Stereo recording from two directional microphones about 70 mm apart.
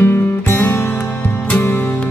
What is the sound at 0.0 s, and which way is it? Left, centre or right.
Music, left.